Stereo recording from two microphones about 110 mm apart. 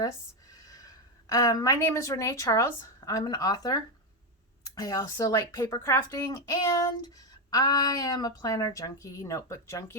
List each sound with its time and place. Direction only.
0.7 s a woman's voice: 35° left (ahead or behind)